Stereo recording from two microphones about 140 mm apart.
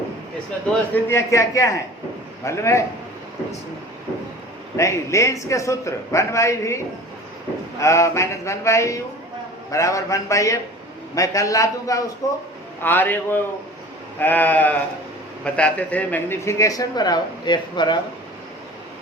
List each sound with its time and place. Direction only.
0.9 s speech: 20° left (ahead or behind)
4.8 s a man's voice: 20° left (ahead or behind)